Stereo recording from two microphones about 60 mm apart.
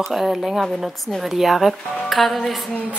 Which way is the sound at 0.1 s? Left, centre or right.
Centre.